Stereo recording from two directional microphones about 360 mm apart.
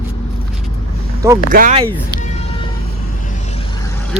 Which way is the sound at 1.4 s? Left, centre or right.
Right.